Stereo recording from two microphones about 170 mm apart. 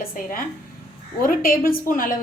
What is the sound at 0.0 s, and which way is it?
A woman's voice, 55° left (ahead or behind).